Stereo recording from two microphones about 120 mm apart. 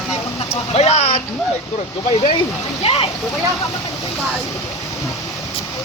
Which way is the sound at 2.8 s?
55° left (ahead or behind).